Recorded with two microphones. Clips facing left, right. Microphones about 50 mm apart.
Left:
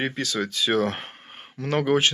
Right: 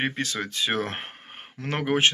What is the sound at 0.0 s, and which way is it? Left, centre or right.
Speech, right.